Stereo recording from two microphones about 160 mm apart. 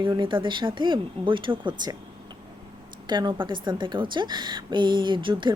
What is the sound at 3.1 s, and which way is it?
Speech, 30° right (ahead or behind).